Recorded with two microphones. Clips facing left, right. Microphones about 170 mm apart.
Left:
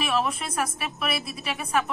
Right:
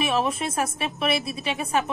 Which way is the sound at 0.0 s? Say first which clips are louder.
Right 2 dB; 20° right (ahead or behind).